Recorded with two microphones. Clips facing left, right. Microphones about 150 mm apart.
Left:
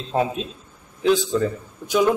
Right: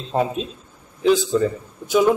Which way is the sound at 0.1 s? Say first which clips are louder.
Right 1 dB; centre (ahead or behind).